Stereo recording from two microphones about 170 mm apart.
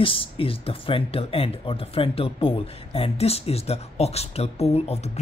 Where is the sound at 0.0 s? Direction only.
30° left (ahead or behind).